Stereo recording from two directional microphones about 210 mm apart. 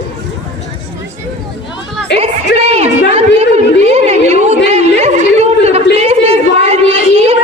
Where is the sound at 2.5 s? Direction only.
30° right (ahead or behind).